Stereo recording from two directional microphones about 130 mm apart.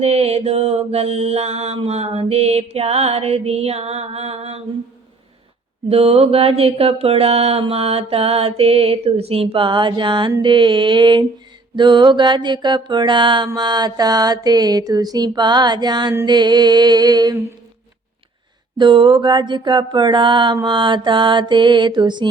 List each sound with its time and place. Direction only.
0.0 s mantra: 50° right (ahead or behind)
5.9 s mantra: 50° right (ahead or behind); by 17.3 s 30° right (ahead or behind)
18.8 s mantra: 40° right (ahead or behind)